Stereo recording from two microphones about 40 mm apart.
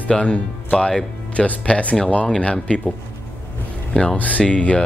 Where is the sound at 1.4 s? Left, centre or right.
Left.